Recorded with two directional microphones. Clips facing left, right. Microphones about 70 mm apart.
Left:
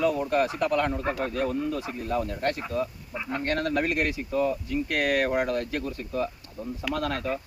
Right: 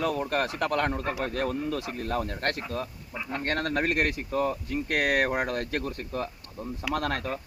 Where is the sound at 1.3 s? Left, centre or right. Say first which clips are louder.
Left 1 dB; right.